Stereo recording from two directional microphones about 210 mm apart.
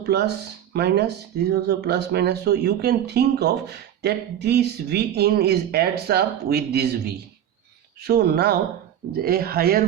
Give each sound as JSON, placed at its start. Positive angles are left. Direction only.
{"t": 0.0, "sound": "speech", "side_deg": -50}